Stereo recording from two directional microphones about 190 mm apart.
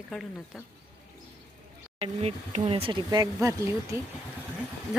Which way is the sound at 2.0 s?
30° right (ahead or behind).